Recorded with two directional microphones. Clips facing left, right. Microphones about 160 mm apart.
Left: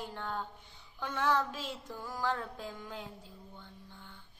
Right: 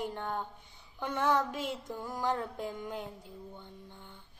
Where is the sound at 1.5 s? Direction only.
60° right (ahead or behind).